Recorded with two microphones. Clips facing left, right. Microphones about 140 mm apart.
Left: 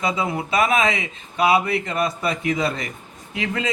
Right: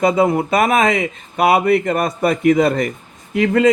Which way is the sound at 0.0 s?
50° right (ahead or behind).